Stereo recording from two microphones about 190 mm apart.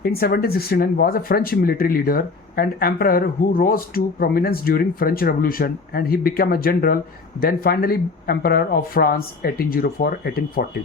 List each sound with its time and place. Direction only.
0.0 s speech: 55° left (ahead or behind)